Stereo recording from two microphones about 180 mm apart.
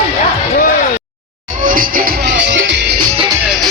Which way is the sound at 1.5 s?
45° right (ahead or behind).